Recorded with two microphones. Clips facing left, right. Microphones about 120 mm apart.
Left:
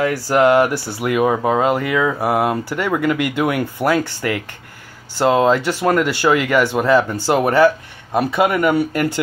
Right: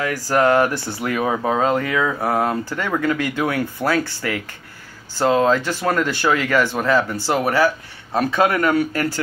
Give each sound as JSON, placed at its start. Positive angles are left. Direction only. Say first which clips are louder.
{"t": 0.0, "sound": "speech", "louder": "left 3 dB", "side_deg": 15}
{"t": 5.1, "sound": "speech", "louder": "left 2 dB", "side_deg": 15}